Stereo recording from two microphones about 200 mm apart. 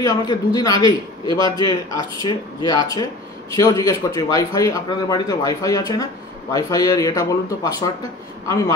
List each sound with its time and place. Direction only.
0.0 s a man's voice: 20° left (ahead or behind)